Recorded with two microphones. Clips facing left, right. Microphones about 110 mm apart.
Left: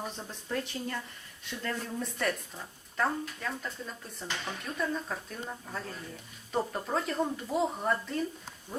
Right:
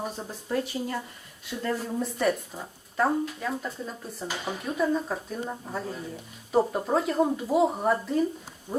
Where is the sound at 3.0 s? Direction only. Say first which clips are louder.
Right 6 dB; 10° right (ahead or behind).